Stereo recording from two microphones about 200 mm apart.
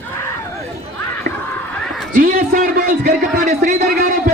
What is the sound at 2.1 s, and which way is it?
A man's voice, 45° right (ahead or behind).